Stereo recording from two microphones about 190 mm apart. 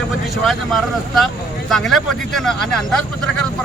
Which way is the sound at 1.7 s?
Centre (ahead or behind).